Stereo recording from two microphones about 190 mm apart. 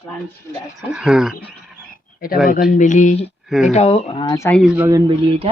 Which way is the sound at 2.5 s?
45° left (ahead or behind).